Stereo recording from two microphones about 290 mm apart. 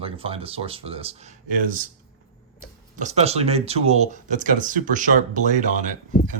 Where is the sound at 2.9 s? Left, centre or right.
Right.